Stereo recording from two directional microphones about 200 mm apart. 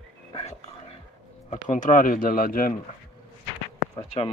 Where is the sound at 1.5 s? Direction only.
40° left (ahead or behind).